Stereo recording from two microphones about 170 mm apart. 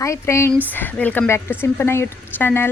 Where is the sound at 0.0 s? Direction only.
15° left (ahead or behind).